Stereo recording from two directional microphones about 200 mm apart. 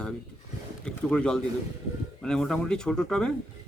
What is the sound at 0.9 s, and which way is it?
A man's voice, 5° left (ahead or behind).